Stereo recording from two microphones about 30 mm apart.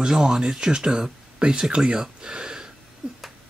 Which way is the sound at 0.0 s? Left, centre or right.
Right.